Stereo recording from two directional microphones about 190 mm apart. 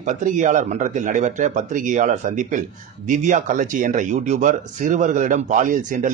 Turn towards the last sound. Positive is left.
turn(degrees=-45)  # may be behind; listen again after turning